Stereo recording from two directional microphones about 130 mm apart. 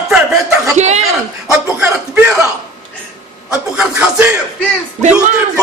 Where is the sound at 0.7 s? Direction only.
60° right (ahead or behind).